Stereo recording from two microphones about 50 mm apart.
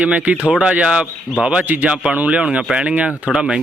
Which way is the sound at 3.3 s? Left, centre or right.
Centre.